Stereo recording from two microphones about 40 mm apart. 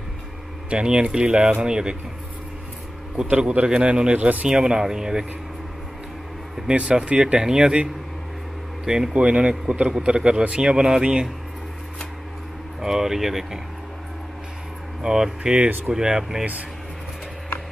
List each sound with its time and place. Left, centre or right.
0.7 s speech: right
3.2 s speech: right
4.5 s speech: centre
7.0 s speech: right
9.1 s speech: right
12.8 s speech: centre
15.0 s speech: centre